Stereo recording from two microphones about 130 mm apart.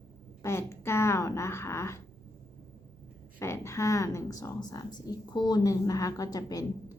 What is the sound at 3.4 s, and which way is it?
Speech, 20° left (ahead or behind).